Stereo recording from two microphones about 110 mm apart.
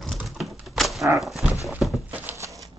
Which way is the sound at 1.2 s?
Centre (ahead or behind).